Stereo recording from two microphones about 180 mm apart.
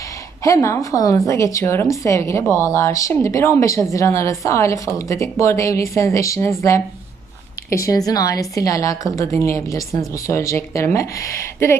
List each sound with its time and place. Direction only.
0.4 s a woman's voice: 15° left (ahead or behind)